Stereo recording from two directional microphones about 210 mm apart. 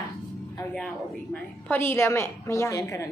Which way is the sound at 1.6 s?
10° left (ahead or behind).